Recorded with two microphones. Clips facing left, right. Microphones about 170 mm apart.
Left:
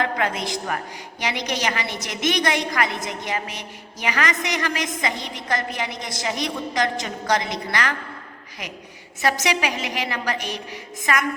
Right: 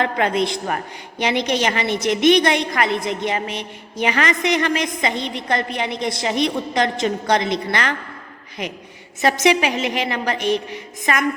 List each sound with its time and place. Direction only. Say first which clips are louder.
0.0 s a woman's voice: right 5 dB; 25° right (ahead or behind)
9.2 s a woman's voice: right 5 dB; 20° right (ahead or behind)